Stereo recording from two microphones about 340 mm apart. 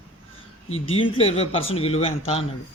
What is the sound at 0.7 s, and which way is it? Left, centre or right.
Speech, centre.